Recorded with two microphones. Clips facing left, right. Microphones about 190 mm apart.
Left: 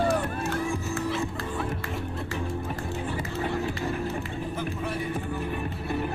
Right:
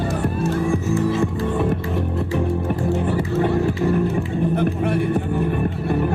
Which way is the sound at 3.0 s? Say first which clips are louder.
Right 10 dB; 60° right (ahead or behind).